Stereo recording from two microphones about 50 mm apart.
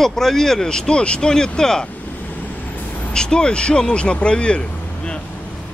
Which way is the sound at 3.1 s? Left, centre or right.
Centre.